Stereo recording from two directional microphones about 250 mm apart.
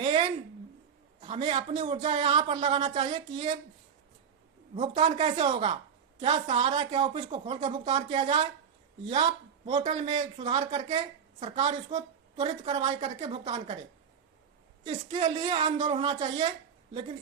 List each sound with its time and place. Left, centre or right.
0.0 s a sound: right
1.2 s a woman's voice: right
4.7 s a woman's voice: right
14.8 s a woman's voice: right